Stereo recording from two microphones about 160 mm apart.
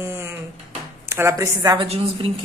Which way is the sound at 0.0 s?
15° right (ahead or behind).